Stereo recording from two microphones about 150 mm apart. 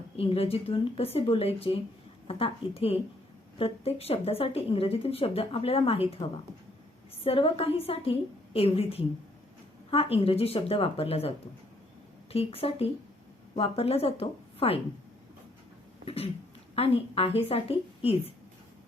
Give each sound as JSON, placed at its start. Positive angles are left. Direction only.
{"t": 0.2, "sound": "a woman's voice", "side_deg": 40}
{"t": 7.3, "sound": "a woman's voice", "side_deg": 40}
{"t": 16.0, "sound": "a woman's voice", "side_deg": 40}